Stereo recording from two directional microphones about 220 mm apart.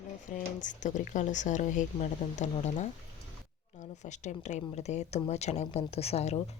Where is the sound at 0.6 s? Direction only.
35° left (ahead or behind).